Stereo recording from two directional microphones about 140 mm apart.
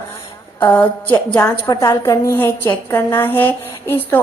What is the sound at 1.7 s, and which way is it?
A woman's voice, 25° left (ahead or behind).